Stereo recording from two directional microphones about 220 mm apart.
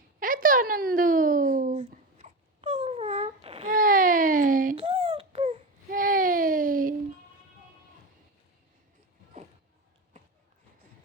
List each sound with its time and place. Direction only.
0.2 s a sound: 40° right (ahead or behind)
3.7 s baby cry: 40° right (ahead or behind)
4.8 s baby cry: 25° right (ahead or behind)